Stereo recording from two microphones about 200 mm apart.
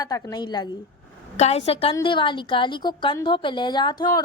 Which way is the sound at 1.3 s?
35° left (ahead or behind).